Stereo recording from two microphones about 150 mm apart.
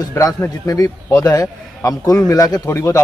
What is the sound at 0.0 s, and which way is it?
A man's voice, 20° left (ahead or behind).